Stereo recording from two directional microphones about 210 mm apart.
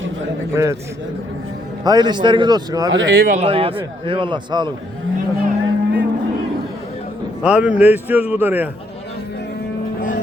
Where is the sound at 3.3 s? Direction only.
30° right (ahead or behind).